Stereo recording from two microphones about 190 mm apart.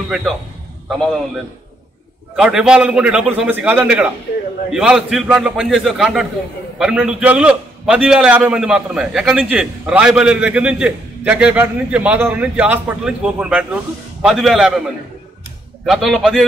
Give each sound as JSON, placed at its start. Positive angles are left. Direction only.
{"t": 0.8, "sound": "a man's voice", "side_deg": 0}
{"t": 15.8, "sound": "a man's voice", "side_deg": 0}